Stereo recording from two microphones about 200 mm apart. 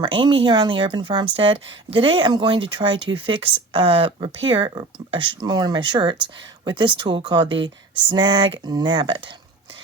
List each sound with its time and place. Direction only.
0.0 s a woman's voice: 25° right (ahead or behind)